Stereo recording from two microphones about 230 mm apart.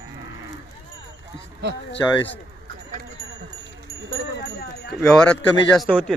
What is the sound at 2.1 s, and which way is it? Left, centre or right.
Speech, centre.